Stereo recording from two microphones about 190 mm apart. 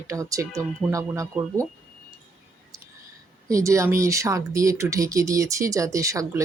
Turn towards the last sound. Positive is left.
turn(degrees=-15)  # may be behind; listen again after turning